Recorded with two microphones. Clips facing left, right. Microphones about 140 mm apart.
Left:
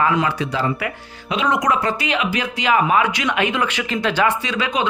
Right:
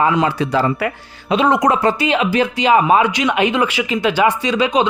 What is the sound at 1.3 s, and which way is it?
A man's voice, 35° right (ahead or behind).